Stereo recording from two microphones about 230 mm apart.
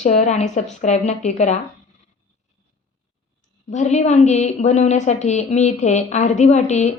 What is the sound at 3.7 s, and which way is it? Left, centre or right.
Speech, left.